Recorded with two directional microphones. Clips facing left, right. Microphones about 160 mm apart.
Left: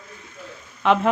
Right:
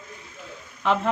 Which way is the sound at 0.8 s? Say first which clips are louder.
Left 5 dB; 70° left (ahead or behind).